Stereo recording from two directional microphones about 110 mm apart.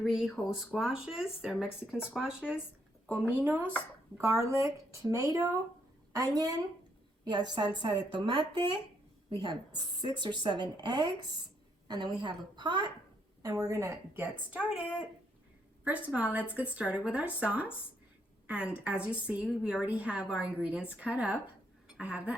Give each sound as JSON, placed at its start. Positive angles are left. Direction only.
{"t": 0.0, "sound": "speech", "side_deg": -5}
{"t": 3.1, "sound": "a woman's voice", "side_deg": -20}
{"t": 15.8, "sound": "a woman's voice", "side_deg": -10}